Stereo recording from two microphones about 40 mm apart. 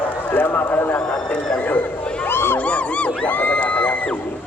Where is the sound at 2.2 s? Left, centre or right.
Left.